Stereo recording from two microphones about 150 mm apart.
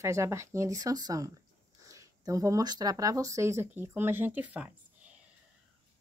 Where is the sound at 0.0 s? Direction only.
20° right (ahead or behind).